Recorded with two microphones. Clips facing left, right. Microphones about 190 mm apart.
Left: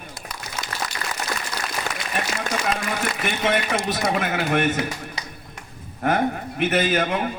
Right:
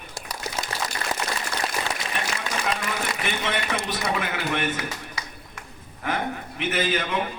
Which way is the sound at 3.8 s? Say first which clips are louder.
Left 4 dB; 45° left (ahead or behind).